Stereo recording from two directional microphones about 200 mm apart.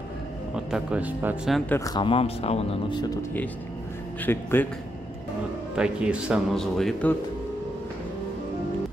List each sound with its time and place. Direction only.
0.6 s a man's voice: 5° right (ahead or behind)
1.7 s speech: 20° left (ahead or behind)
4.3 s a man's voice: 10° left (ahead or behind)
5.8 s a man's voice: 5° right (ahead or behind)